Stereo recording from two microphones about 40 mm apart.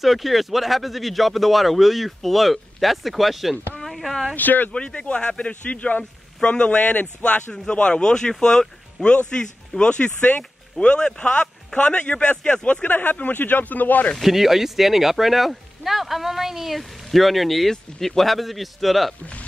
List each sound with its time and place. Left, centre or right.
0.0 s speech: centre
4.4 s speech: left
4.7 s a man's voice: left
6.4 s a man's voice: left
6.8 s a man's voice: left
10.8 s a man's voice: left
12.8 s speech: left
14.2 s speech: centre